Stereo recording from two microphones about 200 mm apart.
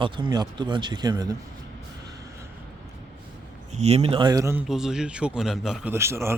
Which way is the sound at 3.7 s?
35° right (ahead or behind).